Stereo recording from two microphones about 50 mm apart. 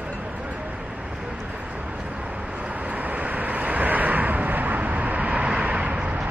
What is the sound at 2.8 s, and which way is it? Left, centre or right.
Vehicle, right.